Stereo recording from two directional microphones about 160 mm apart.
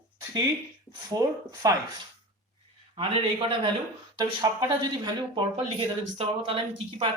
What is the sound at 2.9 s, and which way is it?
Speech, 35° right (ahead or behind).